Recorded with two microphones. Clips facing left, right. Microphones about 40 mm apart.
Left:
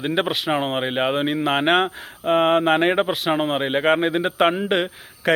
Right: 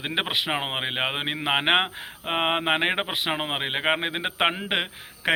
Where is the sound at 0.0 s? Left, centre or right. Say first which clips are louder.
Left 4 dB; centre.